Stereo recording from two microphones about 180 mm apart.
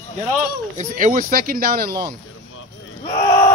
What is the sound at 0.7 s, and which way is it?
Speech, 45° right (ahead or behind).